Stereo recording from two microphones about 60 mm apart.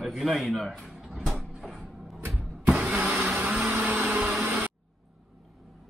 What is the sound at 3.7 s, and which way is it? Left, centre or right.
Vehicle, right.